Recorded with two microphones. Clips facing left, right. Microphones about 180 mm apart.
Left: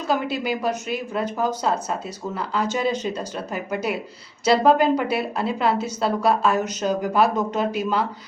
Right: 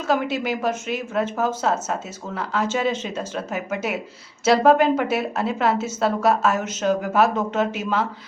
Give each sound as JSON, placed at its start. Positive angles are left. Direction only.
{"t": 0.1, "sound": "speech", "side_deg": 0}